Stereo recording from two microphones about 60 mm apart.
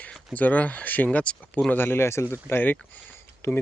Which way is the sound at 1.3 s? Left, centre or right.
Left.